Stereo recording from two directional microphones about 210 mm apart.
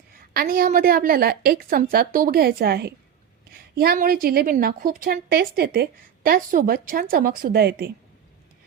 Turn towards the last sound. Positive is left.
turn(degrees=-45)  # may be behind; listen again after turning